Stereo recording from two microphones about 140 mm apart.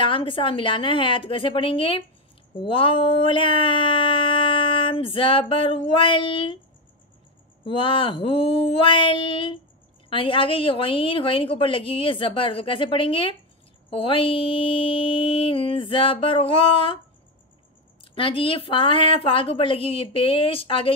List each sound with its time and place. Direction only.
0.0 s speech: 40° left (ahead or behind)
7.6 s speech: 40° left (ahead or behind)
18.1 s speech: 40° left (ahead or behind)